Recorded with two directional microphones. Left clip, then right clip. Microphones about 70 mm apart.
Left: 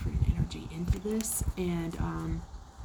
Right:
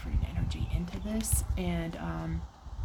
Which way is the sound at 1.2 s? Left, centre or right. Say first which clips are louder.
Left 2 dB; centre.